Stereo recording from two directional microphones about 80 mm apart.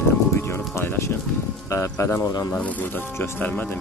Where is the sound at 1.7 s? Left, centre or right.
Left.